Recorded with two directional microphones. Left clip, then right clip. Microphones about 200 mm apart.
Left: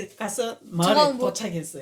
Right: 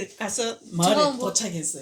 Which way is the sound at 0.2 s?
45° left (ahead or behind).